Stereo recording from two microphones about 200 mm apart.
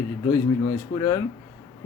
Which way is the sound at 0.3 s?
15° left (ahead or behind).